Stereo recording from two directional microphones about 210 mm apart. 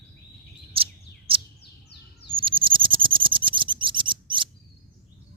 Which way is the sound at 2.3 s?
25° right (ahead or behind).